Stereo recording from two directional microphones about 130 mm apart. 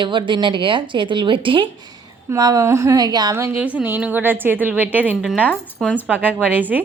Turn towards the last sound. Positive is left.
turn(degrees=-15)  # may be behind; listen again after turning